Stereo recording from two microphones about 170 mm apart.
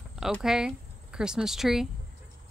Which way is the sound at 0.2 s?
5° right (ahead or behind).